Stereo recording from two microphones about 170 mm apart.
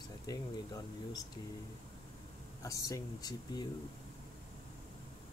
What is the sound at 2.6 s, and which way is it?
Speech, 20° left (ahead or behind).